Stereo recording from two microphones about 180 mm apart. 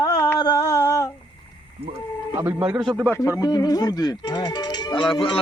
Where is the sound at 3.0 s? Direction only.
15° left (ahead or behind).